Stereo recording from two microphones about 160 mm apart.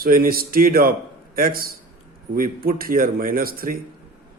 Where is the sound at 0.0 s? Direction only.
65° right (ahead or behind).